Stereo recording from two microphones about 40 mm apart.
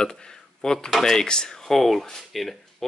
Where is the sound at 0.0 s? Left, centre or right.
Centre.